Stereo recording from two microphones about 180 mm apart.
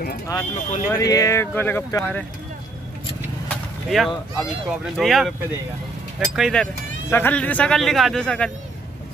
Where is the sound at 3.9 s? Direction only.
Centre (ahead or behind).